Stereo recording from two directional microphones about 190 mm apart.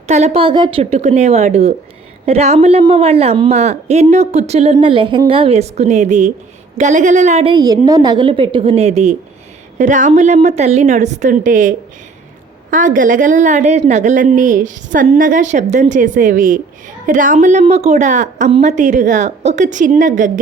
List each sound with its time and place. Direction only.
0.1 s a woman's voice: 35° right (ahead or behind)
7.5 s a woman's voice: 20° right (ahead or behind); by 11.7 s 45° right (ahead or behind)
12.7 s a woman's voice: 45° right (ahead or behind)